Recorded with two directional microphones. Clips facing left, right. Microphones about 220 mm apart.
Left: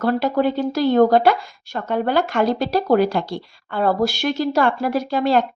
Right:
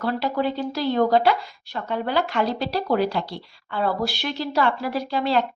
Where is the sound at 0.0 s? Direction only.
50° left (ahead or behind).